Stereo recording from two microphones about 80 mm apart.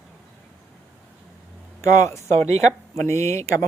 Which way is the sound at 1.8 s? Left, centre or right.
Left.